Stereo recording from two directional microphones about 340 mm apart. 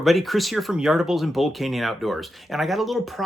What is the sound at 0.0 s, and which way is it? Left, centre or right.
Speech, centre.